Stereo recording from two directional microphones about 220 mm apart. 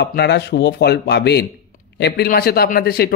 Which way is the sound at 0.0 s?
50° left (ahead or behind).